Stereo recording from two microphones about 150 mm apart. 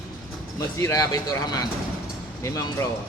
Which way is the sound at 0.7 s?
20° left (ahead or behind).